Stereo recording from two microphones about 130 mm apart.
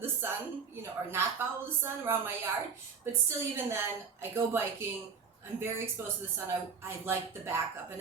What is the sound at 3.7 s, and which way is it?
A woman's voice, 20° right (ahead or behind).